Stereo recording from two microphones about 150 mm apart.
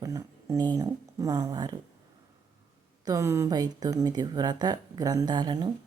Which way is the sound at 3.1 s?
20° right (ahead or behind).